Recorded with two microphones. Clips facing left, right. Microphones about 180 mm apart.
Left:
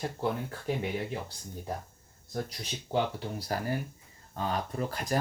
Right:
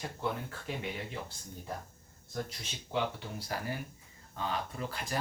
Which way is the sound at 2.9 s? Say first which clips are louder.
Left 4 dB; 40° left (ahead or behind).